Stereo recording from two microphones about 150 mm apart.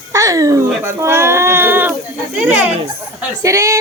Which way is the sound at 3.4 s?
20° right (ahead or behind).